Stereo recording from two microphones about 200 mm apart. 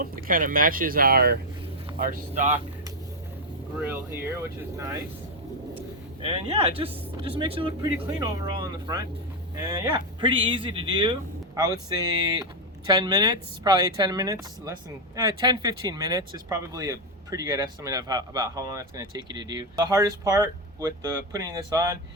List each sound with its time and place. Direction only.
0.0 s speech: 45° right (ahead or behind)
3.8 s speech: 10° right (ahead or behind)
6.2 s speech: 30° right (ahead or behind)
12.9 s speech: 20° right (ahead or behind)